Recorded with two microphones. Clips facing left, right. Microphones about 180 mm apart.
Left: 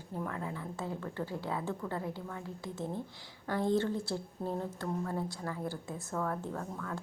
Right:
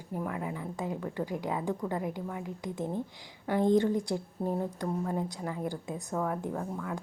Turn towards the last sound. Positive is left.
turn(degrees=-15)  # may be behind; listen again after turning